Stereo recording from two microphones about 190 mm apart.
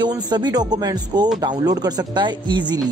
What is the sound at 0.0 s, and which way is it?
Speech, 25° right (ahead or behind).